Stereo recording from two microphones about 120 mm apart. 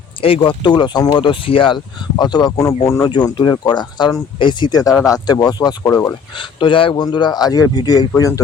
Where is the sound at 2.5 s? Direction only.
20° left (ahead or behind).